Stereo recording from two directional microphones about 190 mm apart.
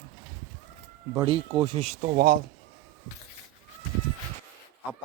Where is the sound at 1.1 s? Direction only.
25° right (ahead or behind); by 2.3 s 45° right (ahead or behind).